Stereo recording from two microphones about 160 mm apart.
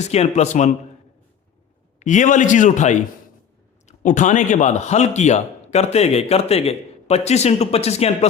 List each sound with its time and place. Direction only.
0.1 s a man's voice: 45° left (ahead or behind)
2.0 s a man's voice: 50° left (ahead or behind)